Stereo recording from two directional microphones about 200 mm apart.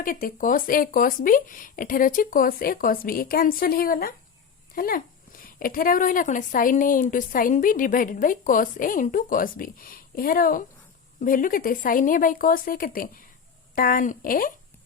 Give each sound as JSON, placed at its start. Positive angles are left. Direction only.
{"t": 0.0, "sound": "a woman's voice", "side_deg": 45}